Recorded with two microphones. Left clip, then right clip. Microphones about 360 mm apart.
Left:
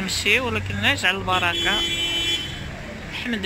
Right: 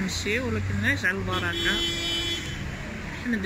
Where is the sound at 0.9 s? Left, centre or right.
Centre.